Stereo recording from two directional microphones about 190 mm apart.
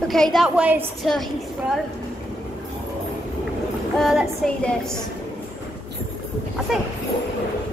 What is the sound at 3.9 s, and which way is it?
Speech, centre (ahead or behind).